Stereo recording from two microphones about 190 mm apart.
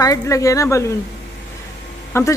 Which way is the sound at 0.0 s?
20° left (ahead or behind).